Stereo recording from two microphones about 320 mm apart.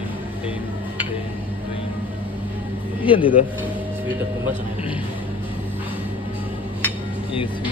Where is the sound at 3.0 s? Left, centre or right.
Centre.